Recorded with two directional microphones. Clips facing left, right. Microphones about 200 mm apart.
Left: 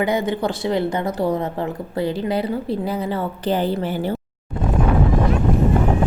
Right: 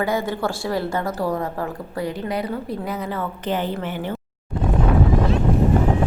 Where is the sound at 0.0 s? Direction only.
20° left (ahead or behind); by 4.1 s 35° left (ahead or behind).